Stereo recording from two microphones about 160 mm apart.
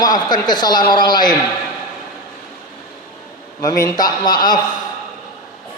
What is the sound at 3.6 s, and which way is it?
A man's voice, 20° left (ahead or behind).